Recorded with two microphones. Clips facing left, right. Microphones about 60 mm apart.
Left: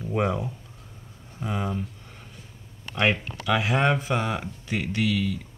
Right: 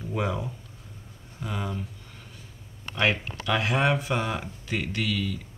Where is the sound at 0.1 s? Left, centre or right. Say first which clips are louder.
Left 4 dB; centre.